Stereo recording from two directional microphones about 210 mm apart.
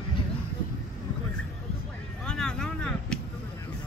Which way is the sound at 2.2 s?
5° left (ahead or behind).